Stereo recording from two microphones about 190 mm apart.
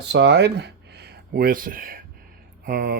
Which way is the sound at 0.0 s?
65° right (ahead or behind).